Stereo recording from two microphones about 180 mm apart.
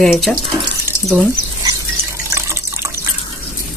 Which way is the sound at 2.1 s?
15° right (ahead or behind).